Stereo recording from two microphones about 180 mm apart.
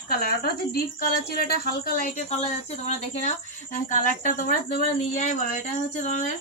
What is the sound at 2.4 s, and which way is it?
Speech, 40° left (ahead or behind).